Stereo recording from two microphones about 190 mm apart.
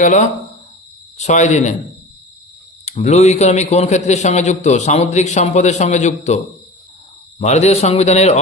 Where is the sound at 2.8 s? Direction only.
40° left (ahead or behind).